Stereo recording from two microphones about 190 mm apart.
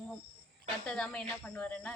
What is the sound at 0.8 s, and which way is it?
Speech, 5° left (ahead or behind).